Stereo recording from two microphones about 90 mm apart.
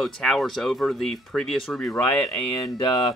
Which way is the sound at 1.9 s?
20° left (ahead or behind).